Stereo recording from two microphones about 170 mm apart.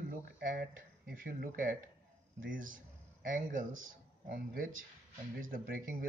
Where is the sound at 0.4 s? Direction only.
60° right (ahead or behind).